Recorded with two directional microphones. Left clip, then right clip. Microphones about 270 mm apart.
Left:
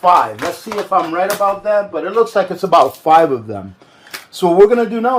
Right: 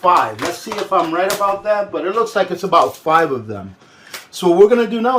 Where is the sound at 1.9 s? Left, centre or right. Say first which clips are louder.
Left 3 dB; left.